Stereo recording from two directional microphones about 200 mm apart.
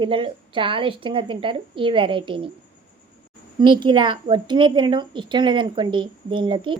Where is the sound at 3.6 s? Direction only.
25° right (ahead or behind).